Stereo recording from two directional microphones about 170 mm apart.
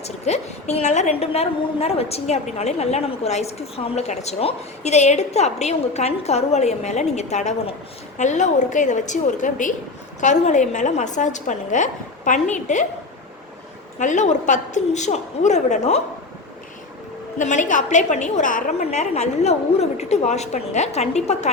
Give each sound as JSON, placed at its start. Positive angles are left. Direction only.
{"t": 0.0, "sound": "a woman's voice", "side_deg": 40}
{"t": 14.0, "sound": "a woman's voice", "side_deg": 45}
{"t": 17.3, "sound": "a woman's voice", "side_deg": 45}